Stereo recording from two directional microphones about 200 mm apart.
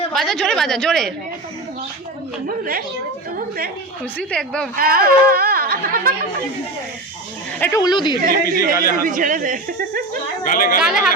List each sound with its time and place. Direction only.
0.1 s a woman's voice: centre (ahead or behind)
2.5 s speech: 45° right (ahead or behind)
4.2 s a woman's voice: 5° left (ahead or behind)
4.8 s speech: 50° right (ahead or behind)
7.6 s speech: 15° left (ahead or behind)
8.2 s speech: 45° right (ahead or behind)
10.4 s speech: 45° left (ahead or behind)
10.8 s a woman's voice: 5° right (ahead or behind)